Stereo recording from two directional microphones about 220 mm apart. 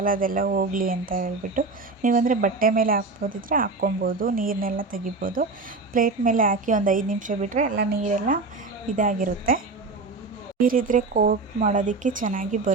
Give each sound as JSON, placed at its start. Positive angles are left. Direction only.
{"t": 0.0, "sound": "speech", "side_deg": -40}
{"t": 10.6, "sound": "speech", "side_deg": -40}